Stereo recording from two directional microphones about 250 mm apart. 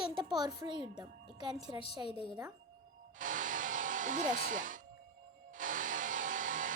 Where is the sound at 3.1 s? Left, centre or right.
Right.